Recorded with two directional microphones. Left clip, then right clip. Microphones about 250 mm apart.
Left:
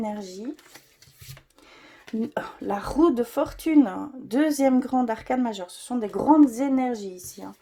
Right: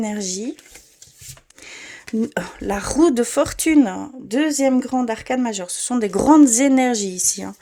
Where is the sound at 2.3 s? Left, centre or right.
Right.